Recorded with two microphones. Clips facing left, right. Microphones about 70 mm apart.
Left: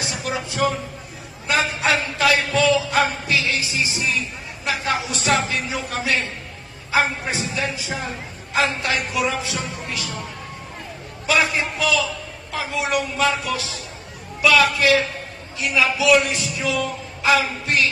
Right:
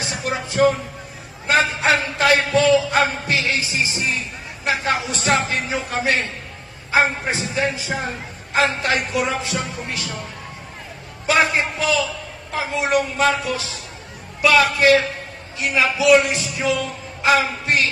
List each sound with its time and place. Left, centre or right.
0.0 s a sound: right
4.6 s a man's voice: right
11.2 s a man's voice: right